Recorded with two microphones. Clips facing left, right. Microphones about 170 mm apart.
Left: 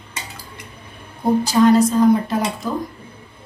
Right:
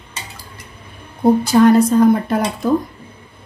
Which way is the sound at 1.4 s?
55° right (ahead or behind).